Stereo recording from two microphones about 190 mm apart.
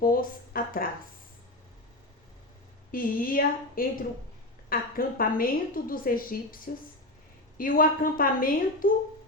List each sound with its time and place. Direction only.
0.0 s a sound: 50° left (ahead or behind)
2.9 s a woman's voice: 50° left (ahead or behind)
7.6 s a woman's voice: 50° left (ahead or behind)